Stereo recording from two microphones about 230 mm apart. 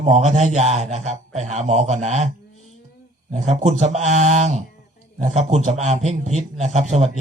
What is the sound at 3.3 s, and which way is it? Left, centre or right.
A man's voice, right.